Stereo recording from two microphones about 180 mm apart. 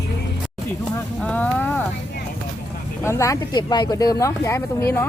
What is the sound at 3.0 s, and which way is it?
Speech, 15° left (ahead or behind).